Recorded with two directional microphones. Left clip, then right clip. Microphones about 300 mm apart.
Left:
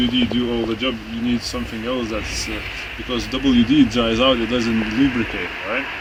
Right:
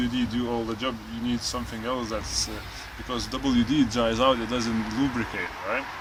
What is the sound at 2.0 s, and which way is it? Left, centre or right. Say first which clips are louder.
A man's voice: left 5 dB; centre.